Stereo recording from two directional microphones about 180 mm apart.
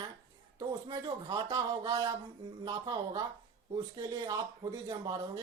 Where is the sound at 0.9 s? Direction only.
25° right (ahead or behind).